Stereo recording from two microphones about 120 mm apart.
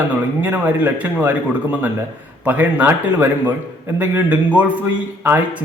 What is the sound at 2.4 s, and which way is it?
A man's voice, 15° right (ahead or behind).